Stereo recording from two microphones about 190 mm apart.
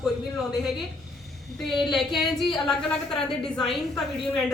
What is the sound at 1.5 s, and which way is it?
A woman's voice, centre (ahead or behind).